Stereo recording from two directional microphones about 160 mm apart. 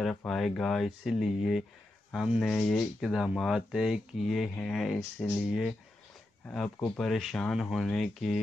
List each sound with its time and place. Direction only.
0.0 s speech: 5° left (ahead or behind)